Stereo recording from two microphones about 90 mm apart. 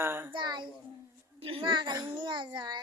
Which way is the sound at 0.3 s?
55° right (ahead or behind).